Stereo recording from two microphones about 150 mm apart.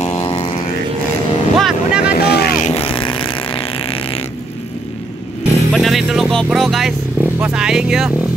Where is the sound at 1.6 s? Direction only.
5° right (ahead or behind).